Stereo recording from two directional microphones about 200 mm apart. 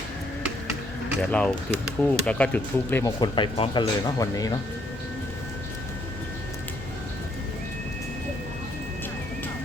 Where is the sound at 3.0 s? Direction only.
20° left (ahead or behind).